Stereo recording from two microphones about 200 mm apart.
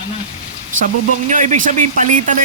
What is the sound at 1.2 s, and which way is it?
Speech, 40° right (ahead or behind).